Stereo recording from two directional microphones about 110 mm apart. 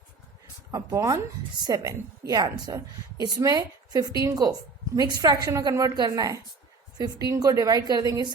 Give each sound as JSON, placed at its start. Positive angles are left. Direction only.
{"t": 0.7, "sound": "a woman's voice", "side_deg": -30}